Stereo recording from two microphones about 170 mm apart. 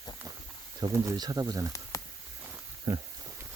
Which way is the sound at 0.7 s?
20° right (ahead or behind).